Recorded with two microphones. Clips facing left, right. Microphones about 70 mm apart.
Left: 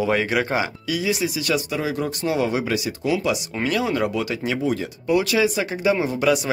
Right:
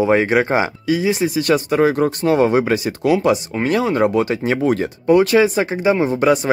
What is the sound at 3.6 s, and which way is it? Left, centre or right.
Speech, right.